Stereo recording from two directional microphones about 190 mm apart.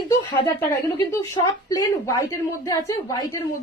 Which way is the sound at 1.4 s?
15° left (ahead or behind).